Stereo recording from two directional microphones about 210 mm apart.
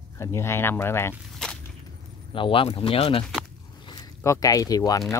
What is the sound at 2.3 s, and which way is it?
Speech, 25° left (ahead or behind).